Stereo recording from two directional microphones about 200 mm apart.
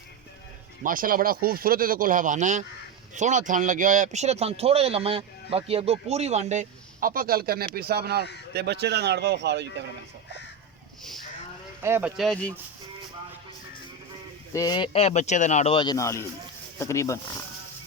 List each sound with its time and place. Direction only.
0.9 s a man's voice: 45° right (ahead or behind); by 9.8 s 60° right (ahead or behind)
11.8 s speech: 10° right (ahead or behind); by 12.5 s 5° left (ahead or behind)
14.5 s speech: 20° left (ahead or behind)